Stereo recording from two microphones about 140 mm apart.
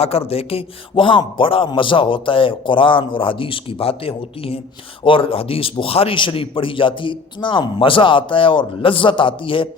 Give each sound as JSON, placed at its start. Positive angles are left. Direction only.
{"t": 0.0, "sound": "a man's voice", "side_deg": 45}